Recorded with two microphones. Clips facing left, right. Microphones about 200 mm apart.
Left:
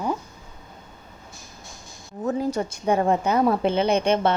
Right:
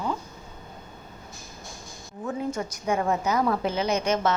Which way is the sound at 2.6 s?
30° left (ahead or behind).